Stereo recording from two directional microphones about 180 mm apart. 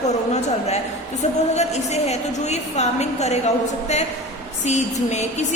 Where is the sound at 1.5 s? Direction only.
40° left (ahead or behind).